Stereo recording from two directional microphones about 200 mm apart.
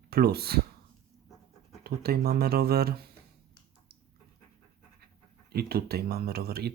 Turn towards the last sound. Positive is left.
turn(degrees=-50)  # may be behind; listen again after turning